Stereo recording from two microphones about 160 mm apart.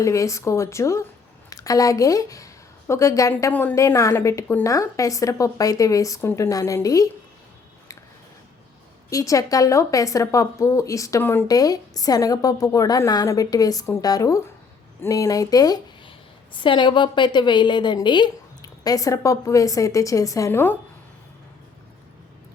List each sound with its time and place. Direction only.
0.0 s a woman's voice: 20° left (ahead or behind)
9.0 s a woman's voice: 20° left (ahead or behind)